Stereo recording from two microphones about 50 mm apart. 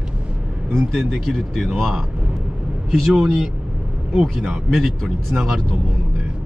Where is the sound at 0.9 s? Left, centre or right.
Centre.